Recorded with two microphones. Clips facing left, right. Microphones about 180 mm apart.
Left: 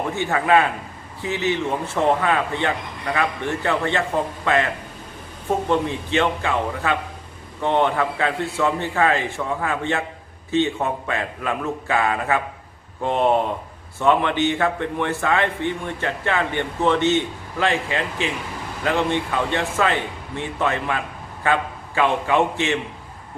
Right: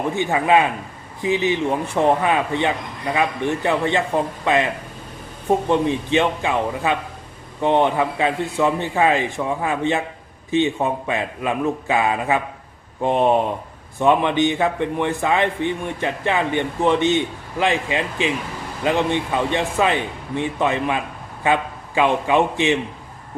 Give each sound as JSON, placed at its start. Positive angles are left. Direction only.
{"t": 0.2, "sound": "a man's voice", "side_deg": -15}